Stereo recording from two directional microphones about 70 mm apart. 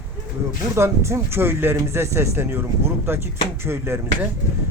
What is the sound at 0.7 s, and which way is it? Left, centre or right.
Speech, right.